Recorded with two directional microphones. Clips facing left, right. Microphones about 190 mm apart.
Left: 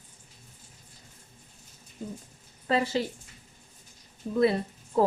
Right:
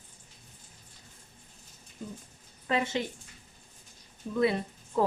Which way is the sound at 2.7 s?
35° left (ahead or behind).